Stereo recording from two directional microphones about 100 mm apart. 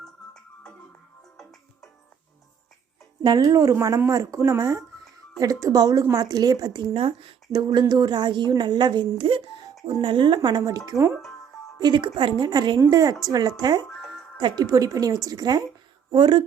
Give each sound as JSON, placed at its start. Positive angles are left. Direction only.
{"t": 0.0, "sound": "music", "side_deg": 5}
{"t": 3.2, "sound": "a woman's voice", "side_deg": -40}
{"t": 6.9, "sound": "speech", "side_deg": -65}
{"t": 7.5, "sound": "a woman's voice", "side_deg": -45}
{"t": 10.6, "sound": "a woman's voice", "side_deg": -35}
{"t": 11.8, "sound": "a woman's voice", "side_deg": -50}